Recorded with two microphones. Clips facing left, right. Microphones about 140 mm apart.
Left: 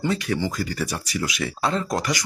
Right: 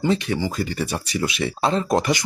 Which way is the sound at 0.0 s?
20° right (ahead or behind).